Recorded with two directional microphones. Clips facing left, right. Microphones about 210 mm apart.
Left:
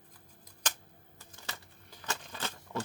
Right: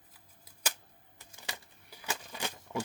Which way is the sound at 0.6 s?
10° right (ahead or behind).